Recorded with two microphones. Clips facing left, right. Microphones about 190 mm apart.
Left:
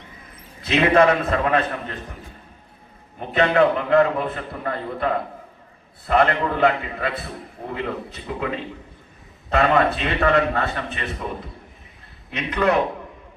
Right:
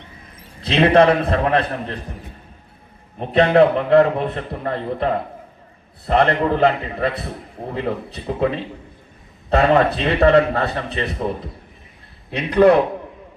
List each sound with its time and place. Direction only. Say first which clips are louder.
0.6 s a man's voice: right 3 dB; 35° right (ahead or behind)
3.2 s a man's voice: right 4 dB; 35° right (ahead or behind)
6.1 s a man's voice: right 3 dB; 35° right (ahead or behind)
9.5 s a man's voice: right 3 dB; 35° right (ahead or behind)
12.3 s a man's voice: right 8 dB; 35° right (ahead or behind)